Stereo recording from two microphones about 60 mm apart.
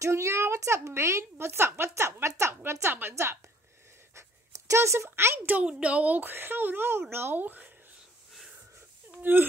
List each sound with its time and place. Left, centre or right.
0.0 s a woman's voice: right
4.1 s writing: right
5.5 s speech: right
9.2 s speech: right